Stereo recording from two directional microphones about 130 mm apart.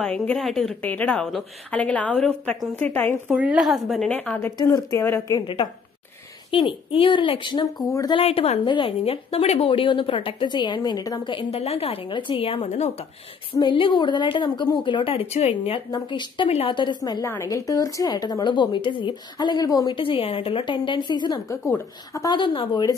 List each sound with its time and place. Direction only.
0.0 s a woman's voice: 5° left (ahead or behind)
3.3 s speech: 10° right (ahead or behind)
4.1 s a woman's voice: 10° left (ahead or behind)
4.6 s speech: 25° left (ahead or behind)
5.0 s a woman's voice: 15° left (ahead or behind)
6.5 s a woman's voice: 40° left (ahead or behind)
8.1 s a woman's voice: 50° left (ahead or behind)
12.6 s speech: 60° left (ahead or behind)
13.5 s a woman's voice: 40° left (ahead or behind)
15.9 s a woman's voice: 35° left (ahead or behind)
16.4 s a woman's voice: 55° left (ahead or behind)
16.7 s a woman's voice: 35° left (ahead or behind)
20.0 s a woman's voice: 45° left (ahead or behind); by 22.3 s 25° left (ahead or behind)
22.3 s a woman's voice: 40° left (ahead or behind)